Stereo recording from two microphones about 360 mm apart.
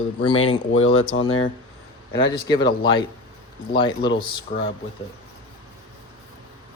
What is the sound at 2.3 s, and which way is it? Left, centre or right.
Speech, centre.